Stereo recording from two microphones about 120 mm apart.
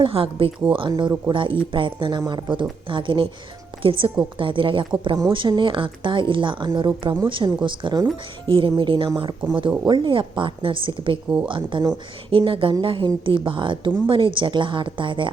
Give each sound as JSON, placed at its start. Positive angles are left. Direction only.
{"t": 0.0, "sound": "a woman's voice", "side_deg": -50}